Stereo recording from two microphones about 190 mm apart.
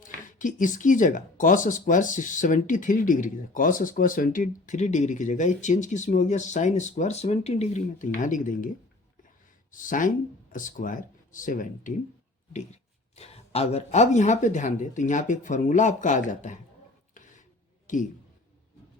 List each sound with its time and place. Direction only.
0.0 s speech: 45° left (ahead or behind)
9.7 s speech: 45° left (ahead or behind)
17.9 s a man's voice: 40° left (ahead or behind)